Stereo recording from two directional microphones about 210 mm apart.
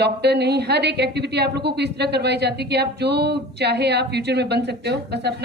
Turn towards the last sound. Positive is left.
turn(degrees=-50)  # may be behind; listen again after turning